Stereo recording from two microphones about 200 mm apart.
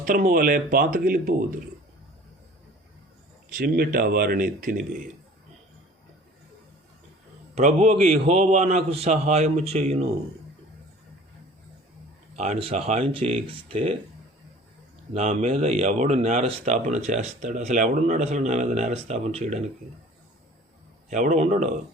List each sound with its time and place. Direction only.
0.0 s speech: 40° right (ahead or behind)
3.6 s speech: 50° right (ahead or behind)
7.5 s speech: 30° right (ahead or behind)
12.4 s speech: 30° right (ahead or behind)
15.1 s speech: 35° right (ahead or behind)
21.1 s speech: 35° right (ahead or behind)